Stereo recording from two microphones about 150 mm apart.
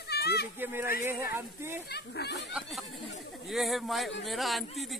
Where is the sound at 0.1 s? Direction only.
90° left.